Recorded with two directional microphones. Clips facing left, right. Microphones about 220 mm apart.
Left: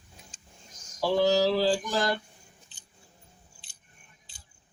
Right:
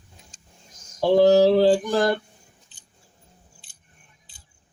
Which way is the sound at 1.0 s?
25° right (ahead or behind).